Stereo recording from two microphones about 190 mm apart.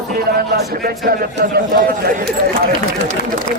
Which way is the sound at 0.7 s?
50° right (ahead or behind).